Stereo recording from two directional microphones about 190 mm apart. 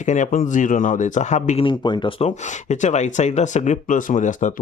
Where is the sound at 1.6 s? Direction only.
25° left (ahead or behind).